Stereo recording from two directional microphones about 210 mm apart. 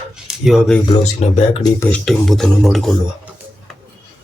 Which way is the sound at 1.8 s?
5° left (ahead or behind).